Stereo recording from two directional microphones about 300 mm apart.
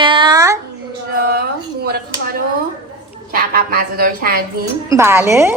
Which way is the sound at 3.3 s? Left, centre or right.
Right.